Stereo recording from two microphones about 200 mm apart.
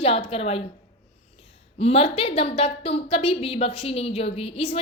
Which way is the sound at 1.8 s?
30° left (ahead or behind).